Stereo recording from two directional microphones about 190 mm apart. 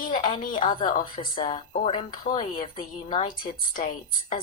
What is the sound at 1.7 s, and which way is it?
Speech, 40° left (ahead or behind).